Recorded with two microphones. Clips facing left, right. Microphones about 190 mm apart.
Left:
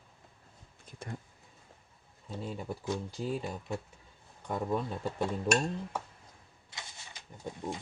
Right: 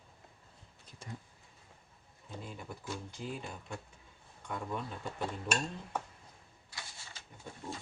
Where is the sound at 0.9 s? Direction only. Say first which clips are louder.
Left 7 dB; 55° left (ahead or behind).